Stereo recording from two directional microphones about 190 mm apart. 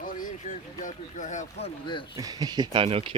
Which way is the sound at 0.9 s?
40° left (ahead or behind).